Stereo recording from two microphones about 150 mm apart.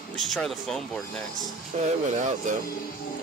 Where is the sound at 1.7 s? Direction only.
45° right (ahead or behind).